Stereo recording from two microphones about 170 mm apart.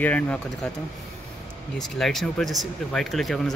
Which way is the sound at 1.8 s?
Centre (ahead or behind).